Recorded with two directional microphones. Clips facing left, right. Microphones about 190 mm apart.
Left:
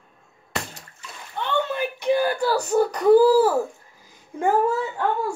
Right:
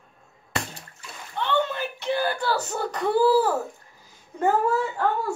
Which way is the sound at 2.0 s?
15° left (ahead or behind).